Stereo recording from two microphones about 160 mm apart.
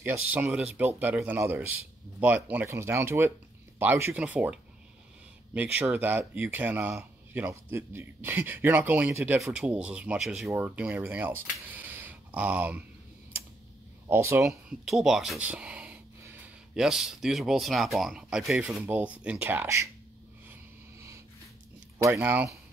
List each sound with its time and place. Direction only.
0.0 s speech: 10° right (ahead or behind)
14.0 s speech: 15° right (ahead or behind)
14.5 s speech: centre (ahead or behind)
21.9 s speech: 20° right (ahead or behind)